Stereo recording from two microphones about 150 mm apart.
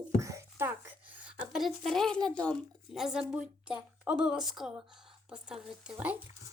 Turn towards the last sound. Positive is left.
turn(degrees=-10)  # may be behind; listen again after turning